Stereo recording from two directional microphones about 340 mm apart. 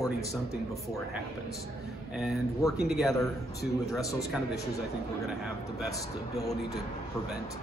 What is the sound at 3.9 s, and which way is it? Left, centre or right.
Speech, centre.